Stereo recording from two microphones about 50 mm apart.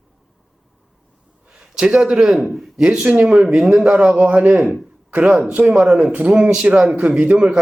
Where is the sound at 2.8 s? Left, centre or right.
Centre.